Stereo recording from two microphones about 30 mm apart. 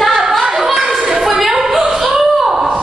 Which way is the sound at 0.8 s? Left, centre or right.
Centre.